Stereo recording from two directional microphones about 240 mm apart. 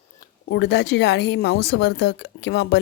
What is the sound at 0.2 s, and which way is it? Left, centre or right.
A woman's voice, left.